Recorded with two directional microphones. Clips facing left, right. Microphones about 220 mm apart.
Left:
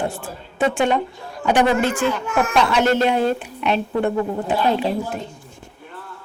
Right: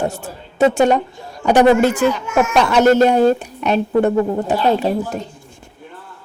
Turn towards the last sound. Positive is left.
turn(degrees=-45)  # may be behind; listen again after turning